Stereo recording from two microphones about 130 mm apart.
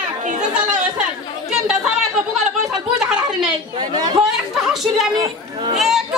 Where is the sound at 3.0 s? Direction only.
5° right (ahead or behind).